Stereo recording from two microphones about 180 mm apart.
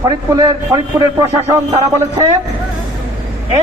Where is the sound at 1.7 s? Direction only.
35° right (ahead or behind).